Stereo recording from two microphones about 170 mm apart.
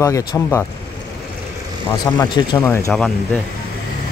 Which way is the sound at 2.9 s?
Centre (ahead or behind).